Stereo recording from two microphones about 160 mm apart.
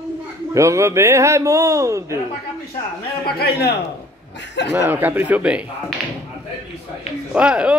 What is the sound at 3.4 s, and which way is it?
A man's voice, 80° left.